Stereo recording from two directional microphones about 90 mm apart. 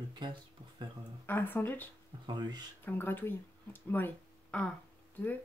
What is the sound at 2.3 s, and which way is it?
Speech, 50° right (ahead or behind).